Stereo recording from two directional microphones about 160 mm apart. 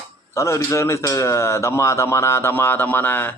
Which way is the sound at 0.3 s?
20° left (ahead or behind).